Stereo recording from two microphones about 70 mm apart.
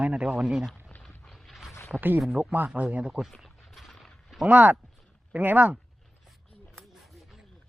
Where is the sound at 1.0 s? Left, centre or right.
Centre.